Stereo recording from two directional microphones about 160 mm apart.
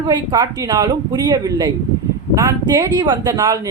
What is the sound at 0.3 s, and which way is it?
Speech, 25° right (ahead or behind).